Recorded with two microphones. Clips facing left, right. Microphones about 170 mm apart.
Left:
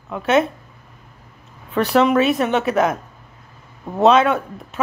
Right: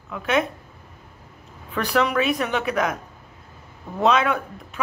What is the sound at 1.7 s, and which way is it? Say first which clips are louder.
A woman's voice: left 6 dB; 30° left (ahead or behind).